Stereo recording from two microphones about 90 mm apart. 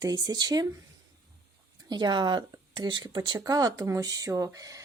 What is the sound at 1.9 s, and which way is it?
Speech, 55° right (ahead or behind).